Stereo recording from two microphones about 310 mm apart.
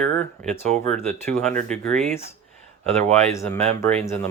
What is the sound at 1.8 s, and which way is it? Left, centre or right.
Speech, centre.